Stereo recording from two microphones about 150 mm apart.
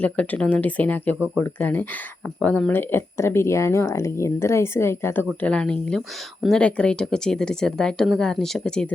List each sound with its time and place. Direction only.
0.0 s speech: 10° left (ahead or behind)